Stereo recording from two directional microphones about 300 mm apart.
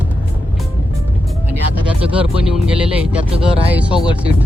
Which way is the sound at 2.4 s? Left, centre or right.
Centre.